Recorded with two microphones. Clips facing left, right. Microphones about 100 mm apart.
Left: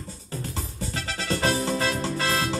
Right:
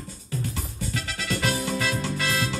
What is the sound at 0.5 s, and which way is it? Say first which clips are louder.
Music: even; 30° left (ahead or behind).